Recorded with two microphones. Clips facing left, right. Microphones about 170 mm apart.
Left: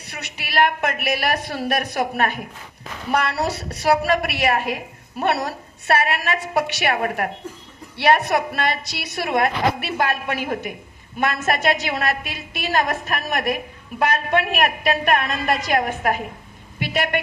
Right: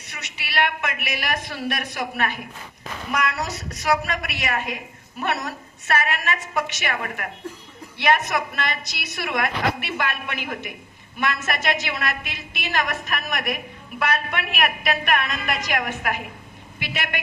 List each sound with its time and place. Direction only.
0.1 s a woman's voice: 45° left (ahead or behind)
3.1 s a woman's voice: 30° left (ahead or behind)